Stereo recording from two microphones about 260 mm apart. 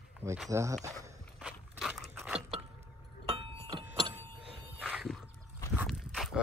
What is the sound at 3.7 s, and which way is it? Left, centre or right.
Keys jangling, centre.